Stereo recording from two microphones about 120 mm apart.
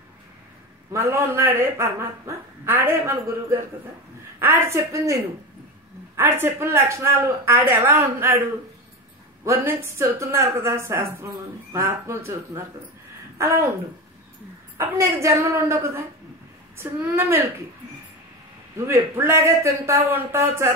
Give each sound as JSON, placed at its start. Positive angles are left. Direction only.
{"t": 0.9, "sound": "speech", "side_deg": -25}
{"t": 14.8, "sound": "a woman's voice", "side_deg": -25}
{"t": 18.9, "sound": "speech", "side_deg": -20}